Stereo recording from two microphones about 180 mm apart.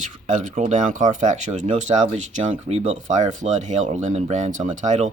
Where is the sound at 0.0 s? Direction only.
45° right (ahead or behind).